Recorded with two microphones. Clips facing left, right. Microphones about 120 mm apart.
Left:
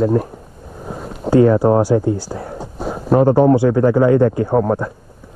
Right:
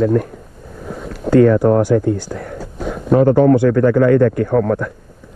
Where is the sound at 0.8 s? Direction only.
40° left (ahead or behind).